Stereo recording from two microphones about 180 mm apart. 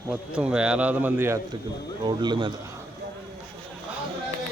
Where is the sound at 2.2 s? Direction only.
25° right (ahead or behind).